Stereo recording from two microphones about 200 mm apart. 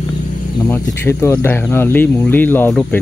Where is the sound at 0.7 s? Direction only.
10° left (ahead or behind).